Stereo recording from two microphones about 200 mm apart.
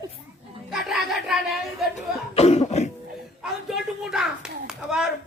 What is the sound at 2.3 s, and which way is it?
Cough, 30° left (ahead or behind).